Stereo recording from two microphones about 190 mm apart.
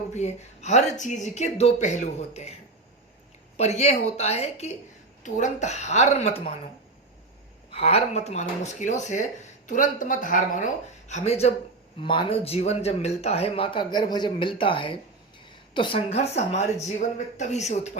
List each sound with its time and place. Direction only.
0.1 s speech: 35° left (ahead or behind)
3.6 s speech: 35° left (ahead or behind)
7.7 s a man's voice: 30° left (ahead or behind)